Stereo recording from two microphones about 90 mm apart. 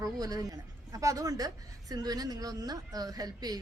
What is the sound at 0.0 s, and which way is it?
A woman's voice, 45° right (ahead or behind).